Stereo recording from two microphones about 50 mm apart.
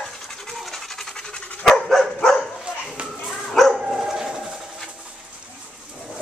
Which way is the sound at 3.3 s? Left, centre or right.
Centre.